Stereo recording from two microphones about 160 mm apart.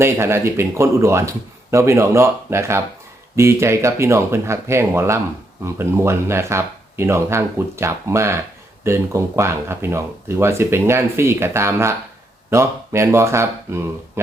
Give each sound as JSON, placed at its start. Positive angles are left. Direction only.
{"t": 0.0, "sound": "speech", "side_deg": -15}